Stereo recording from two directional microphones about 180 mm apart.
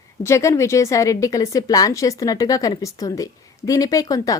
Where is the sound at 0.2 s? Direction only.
15° left (ahead or behind).